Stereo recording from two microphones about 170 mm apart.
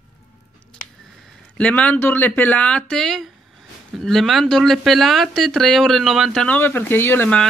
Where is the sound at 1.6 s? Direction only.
5° left (ahead or behind).